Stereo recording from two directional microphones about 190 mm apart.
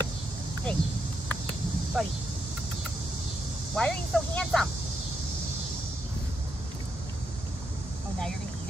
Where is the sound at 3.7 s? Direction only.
5° left (ahead or behind).